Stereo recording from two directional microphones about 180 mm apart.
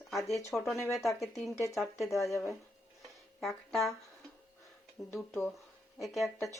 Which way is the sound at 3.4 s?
Centre (ahead or behind).